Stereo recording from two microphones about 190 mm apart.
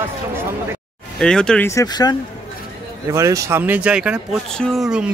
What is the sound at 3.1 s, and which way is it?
Speech, 15° right (ahead or behind).